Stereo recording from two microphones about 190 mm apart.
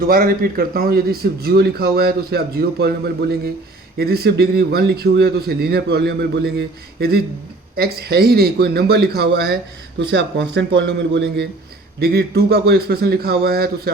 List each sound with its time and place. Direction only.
0.0 s a man's voice: 50° right (ahead or behind)
10.1 s a man's voice: 70° right (ahead or behind)
11.9 s a man's voice: 55° right (ahead or behind)